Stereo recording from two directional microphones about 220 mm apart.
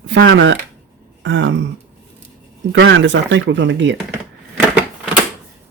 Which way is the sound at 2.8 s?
55° right (ahead or behind).